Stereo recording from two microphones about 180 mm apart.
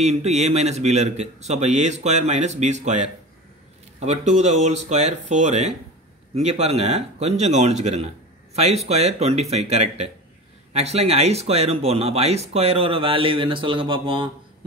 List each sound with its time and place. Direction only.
0.0 s speech: 40° right (ahead or behind)